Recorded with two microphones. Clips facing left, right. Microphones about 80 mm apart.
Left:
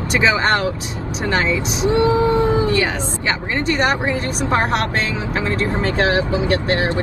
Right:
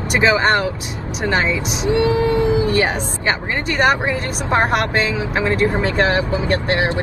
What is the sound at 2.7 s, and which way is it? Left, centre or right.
Speech, right.